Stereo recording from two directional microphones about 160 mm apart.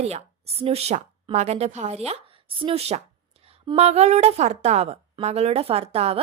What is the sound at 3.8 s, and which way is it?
A woman's voice, 45° right (ahead or behind).